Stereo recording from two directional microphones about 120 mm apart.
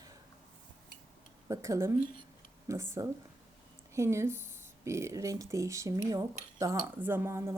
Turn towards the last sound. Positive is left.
turn(degrees=-20)  # may be behind; listen again after turning